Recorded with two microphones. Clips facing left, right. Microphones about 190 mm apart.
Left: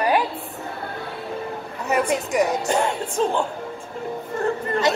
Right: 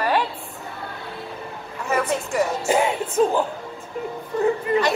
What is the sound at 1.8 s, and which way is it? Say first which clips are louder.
Speech: left 1 dB; 15° left (ahead or behind).